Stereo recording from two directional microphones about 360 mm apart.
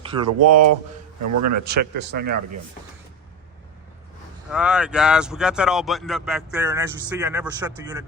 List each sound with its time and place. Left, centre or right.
0.3 s a man's voice: right
4.5 s speech: centre